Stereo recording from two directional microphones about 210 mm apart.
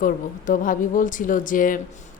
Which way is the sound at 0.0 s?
40° left (ahead or behind).